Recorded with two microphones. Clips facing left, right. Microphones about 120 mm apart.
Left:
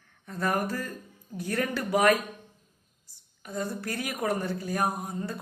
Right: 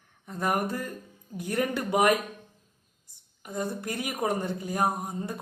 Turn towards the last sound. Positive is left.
turn(degrees=-20)  # may be behind; listen again after turning